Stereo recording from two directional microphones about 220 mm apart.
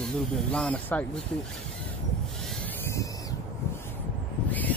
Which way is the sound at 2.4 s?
Centre (ahead or behind).